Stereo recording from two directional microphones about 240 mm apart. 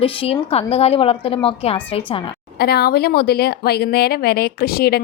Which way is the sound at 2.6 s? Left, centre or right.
Left.